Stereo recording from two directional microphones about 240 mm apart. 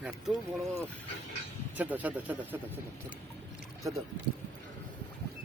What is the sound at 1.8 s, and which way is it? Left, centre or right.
Speech, centre.